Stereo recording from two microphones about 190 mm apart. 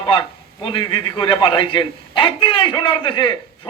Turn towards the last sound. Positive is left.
turn(degrees=25)  # may be behind; listen again after turning